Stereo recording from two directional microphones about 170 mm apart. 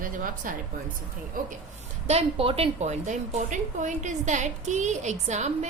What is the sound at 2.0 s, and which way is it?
A woman's voice, 35° right (ahead or behind).